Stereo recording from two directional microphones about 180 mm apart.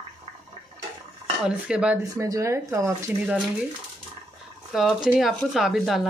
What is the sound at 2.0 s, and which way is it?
Speech, 20° right (ahead or behind).